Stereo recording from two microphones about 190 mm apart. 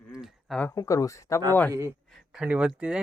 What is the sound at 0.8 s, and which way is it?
Speech, 15° left (ahead or behind).